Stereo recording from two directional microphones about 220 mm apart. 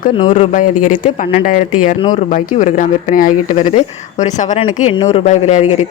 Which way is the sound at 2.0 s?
25° left (ahead or behind).